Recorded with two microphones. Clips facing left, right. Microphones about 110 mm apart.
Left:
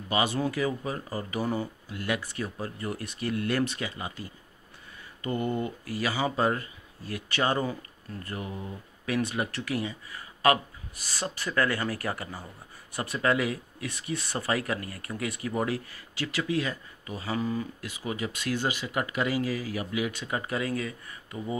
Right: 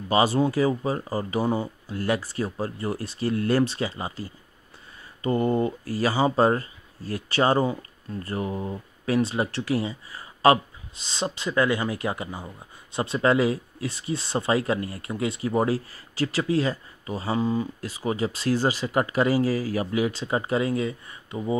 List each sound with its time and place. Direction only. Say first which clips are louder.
0.1 s speech: right 6 dB; 35° right (ahead or behind)
17.7 s speech: right 7 dB; 35° right (ahead or behind)